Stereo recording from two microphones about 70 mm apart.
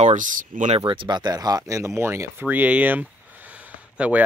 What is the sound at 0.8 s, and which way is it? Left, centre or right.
Speech, right.